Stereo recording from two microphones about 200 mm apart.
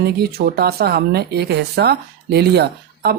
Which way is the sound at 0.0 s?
55° right (ahead or behind).